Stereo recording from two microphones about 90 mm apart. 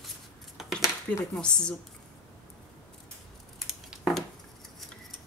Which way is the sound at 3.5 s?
Centre (ahead or behind).